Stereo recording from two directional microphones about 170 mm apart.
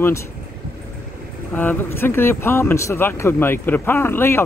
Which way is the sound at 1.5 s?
10° left (ahead or behind).